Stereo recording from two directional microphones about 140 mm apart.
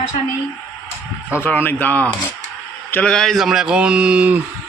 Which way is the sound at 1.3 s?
15° left (ahead or behind).